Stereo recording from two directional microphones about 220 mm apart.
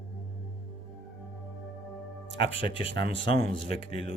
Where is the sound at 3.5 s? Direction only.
25° left (ahead or behind).